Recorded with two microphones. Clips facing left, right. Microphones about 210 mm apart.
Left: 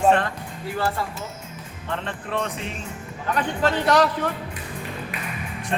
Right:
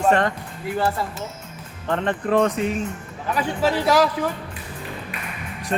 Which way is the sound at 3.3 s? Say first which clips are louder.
Right 1 dB; 5° right (ahead or behind).